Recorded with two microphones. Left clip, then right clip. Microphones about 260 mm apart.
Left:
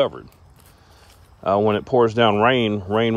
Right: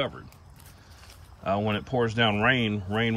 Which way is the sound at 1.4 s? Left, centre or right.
Centre.